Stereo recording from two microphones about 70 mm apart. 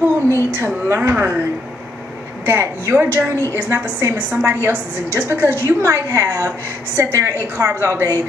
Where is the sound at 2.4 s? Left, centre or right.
Right.